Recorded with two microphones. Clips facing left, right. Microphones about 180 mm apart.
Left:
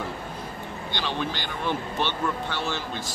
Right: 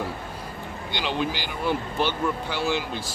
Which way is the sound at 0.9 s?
15° right (ahead or behind).